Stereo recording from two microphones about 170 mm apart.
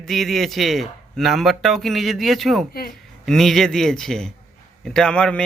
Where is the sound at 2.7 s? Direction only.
65° left (ahead or behind).